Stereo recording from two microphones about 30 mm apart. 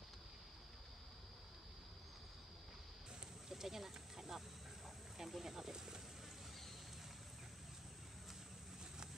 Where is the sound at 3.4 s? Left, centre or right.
Centre.